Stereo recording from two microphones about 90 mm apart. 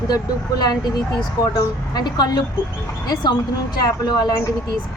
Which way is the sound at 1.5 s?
50° left (ahead or behind).